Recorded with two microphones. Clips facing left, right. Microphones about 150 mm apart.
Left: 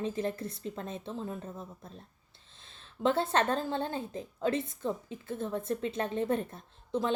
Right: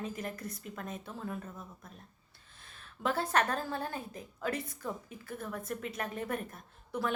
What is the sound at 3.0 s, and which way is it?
A woman's voice, 25° left (ahead or behind).